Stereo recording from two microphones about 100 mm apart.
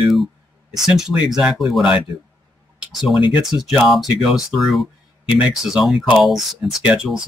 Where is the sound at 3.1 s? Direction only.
60° left (ahead or behind).